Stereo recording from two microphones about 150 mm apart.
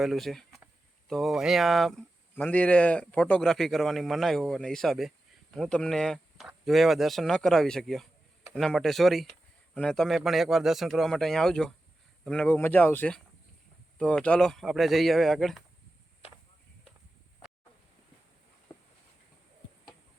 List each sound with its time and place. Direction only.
0.0 s a man's voice: centre (ahead or behind)